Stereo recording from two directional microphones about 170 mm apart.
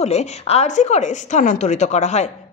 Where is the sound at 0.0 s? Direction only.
40° left (ahead or behind).